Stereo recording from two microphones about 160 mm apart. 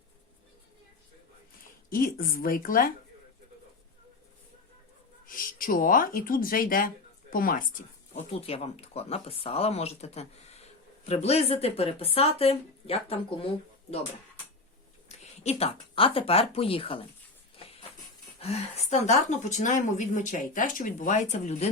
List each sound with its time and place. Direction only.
1.9 s a woman's voice: 60° left (ahead or behind)
5.2 s speech: 60° left (ahead or behind)
8.1 s speech: 40° left (ahead or behind)
15.2 s speech: 40° left (ahead or behind)
18.3 s speech: 40° left (ahead or behind)